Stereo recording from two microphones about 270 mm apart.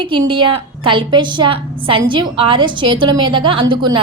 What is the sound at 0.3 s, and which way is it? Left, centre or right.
A woman's voice, centre.